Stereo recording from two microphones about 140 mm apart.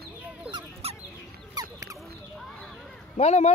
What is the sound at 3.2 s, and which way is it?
Speech, 50° left (ahead or behind).